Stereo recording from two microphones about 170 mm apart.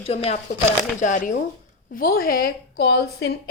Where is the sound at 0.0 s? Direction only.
35° left (ahead or behind).